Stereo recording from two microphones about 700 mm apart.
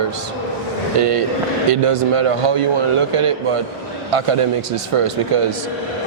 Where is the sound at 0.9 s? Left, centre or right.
Right.